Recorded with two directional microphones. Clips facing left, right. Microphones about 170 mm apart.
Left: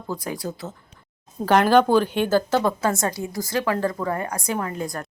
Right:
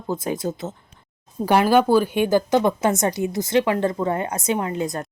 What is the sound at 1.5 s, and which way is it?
Speech, 10° right (ahead or behind).